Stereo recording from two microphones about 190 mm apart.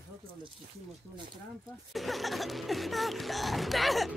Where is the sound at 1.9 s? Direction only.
Centre (ahead or behind).